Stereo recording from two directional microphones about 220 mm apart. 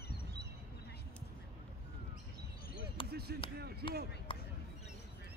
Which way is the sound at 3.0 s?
45° right (ahead or behind).